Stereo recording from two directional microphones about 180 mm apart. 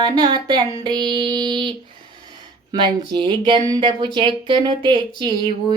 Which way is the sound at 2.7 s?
25° right (ahead or behind).